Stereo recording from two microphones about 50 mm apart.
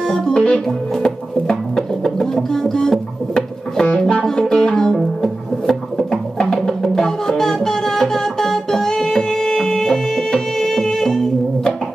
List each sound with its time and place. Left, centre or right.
0.1 s music: centre
1.8 s a sound: centre
4.0 s music: centre